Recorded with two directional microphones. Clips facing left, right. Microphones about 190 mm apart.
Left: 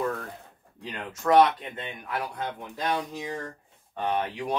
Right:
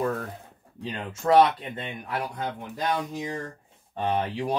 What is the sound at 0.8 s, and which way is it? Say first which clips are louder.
Speech: right 2 dB; 25° right (ahead or behind).